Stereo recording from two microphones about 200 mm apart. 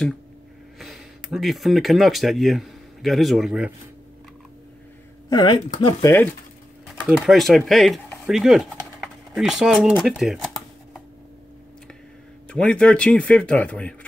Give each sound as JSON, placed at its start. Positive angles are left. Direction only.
{"t": 0.7, "sound": "speech", "side_deg": 0}
{"t": 5.3, "sound": "speech", "side_deg": 20}
{"t": 6.9, "sound": "speech", "side_deg": 0}
{"t": 12.4, "sound": "speech", "side_deg": 5}